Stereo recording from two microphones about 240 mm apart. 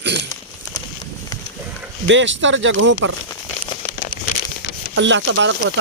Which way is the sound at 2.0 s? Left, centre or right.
Right.